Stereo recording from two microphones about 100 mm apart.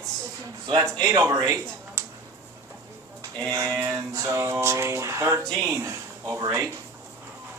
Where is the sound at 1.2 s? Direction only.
25° right (ahead or behind).